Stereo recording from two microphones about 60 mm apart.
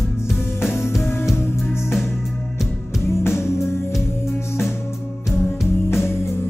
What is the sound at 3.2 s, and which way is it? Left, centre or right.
Music, left.